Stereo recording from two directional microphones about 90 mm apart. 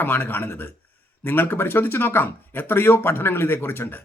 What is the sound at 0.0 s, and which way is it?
Speech, 25° left (ahead or behind).